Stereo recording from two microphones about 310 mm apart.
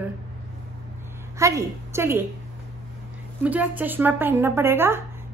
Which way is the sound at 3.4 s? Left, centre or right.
Centre.